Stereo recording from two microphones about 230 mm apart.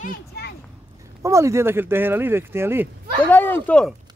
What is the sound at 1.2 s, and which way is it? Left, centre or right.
Speech, centre.